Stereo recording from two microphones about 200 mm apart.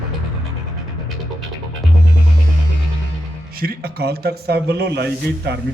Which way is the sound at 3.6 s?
50° right (ahead or behind).